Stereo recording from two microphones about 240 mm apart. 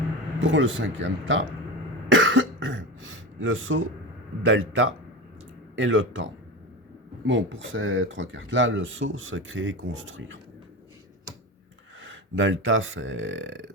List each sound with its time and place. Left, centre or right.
0.4 s speech: right
2.0 s cough: right
4.4 s speech: right
12.0 s speech: right